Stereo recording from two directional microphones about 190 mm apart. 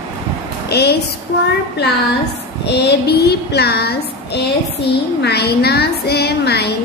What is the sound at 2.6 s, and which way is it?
Speech, 60° left (ahead or behind).